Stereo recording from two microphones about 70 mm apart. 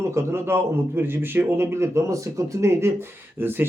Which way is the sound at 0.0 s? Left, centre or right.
Right.